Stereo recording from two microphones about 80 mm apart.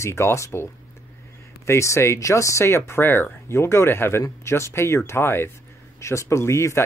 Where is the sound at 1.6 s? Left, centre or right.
Left.